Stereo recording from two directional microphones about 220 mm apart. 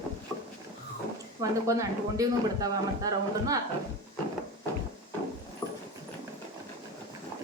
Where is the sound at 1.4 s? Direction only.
15° right (ahead or behind).